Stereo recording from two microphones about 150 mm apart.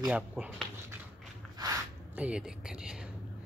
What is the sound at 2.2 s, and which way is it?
Speech, 5° right (ahead or behind).